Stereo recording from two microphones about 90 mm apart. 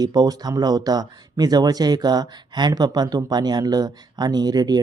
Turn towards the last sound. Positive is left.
turn(degrees=-50)  # may be behind; listen again after turning